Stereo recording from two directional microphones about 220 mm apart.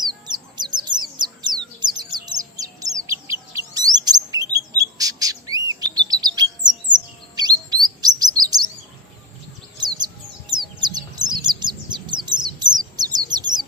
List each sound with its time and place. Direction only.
0.0 s bird: 20° right (ahead or behind)
7.3 s chirp: 20° right (ahead or behind)
9.7 s chirp: 20° right (ahead or behind)
11.9 s bird: 20° right (ahead or behind)